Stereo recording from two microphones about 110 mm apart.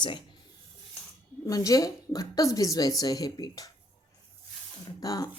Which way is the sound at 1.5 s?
30° left (ahead or behind).